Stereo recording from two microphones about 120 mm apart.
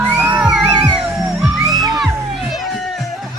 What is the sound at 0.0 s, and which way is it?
Music, 15° right (ahead or behind).